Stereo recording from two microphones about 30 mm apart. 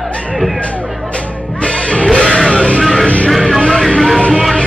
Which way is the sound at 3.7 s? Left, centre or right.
Centre.